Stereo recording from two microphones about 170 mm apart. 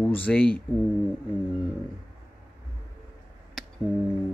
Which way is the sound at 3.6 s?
5° left (ahead or behind).